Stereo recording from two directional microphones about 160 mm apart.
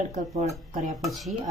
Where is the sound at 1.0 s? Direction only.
Centre (ahead or behind).